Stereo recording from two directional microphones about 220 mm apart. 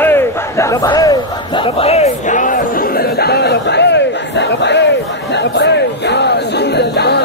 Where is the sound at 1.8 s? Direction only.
30° left (ahead or behind); by 4.9 s 50° left (ahead or behind).